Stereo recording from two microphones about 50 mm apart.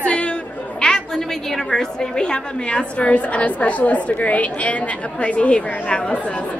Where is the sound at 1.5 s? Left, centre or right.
Centre.